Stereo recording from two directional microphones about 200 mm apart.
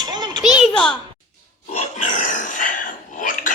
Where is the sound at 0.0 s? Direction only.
20° right (ahead or behind).